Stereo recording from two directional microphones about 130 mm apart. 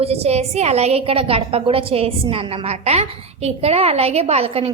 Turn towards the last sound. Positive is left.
turn(degrees=-50)  # may be behind; listen again after turning